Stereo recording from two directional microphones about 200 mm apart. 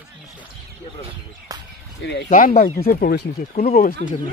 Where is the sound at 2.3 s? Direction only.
40° left (ahead or behind).